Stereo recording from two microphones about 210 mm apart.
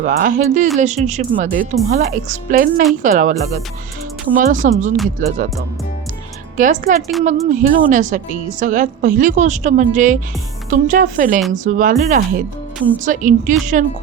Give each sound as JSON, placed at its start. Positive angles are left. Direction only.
{"t": 0.0, "sound": "a woman's voice", "side_deg": -40}
{"t": 6.6, "sound": "a woman's voice", "side_deg": -35}